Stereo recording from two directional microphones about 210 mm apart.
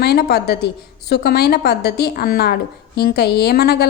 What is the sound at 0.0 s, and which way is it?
A woman's voice, 50° left (ahead or behind).